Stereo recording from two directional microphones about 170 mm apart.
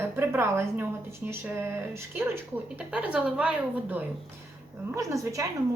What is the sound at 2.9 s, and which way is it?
Speech, 5° right (ahead or behind).